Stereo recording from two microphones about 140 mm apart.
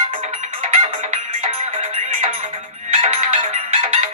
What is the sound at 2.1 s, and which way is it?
Music, 60° right (ahead or behind).